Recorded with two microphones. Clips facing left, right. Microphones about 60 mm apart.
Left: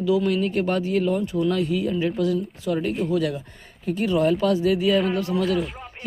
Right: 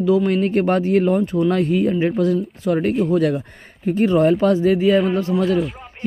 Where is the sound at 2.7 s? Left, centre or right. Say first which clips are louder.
Right 6 dB; right.